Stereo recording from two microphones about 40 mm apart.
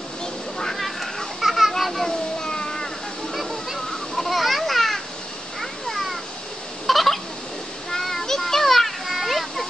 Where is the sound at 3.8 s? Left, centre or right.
Centre.